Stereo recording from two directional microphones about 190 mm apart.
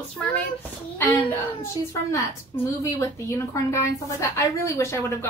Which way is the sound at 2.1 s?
15° left (ahead or behind).